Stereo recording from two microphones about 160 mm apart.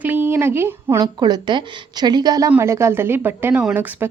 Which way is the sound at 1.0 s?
25° right (ahead or behind).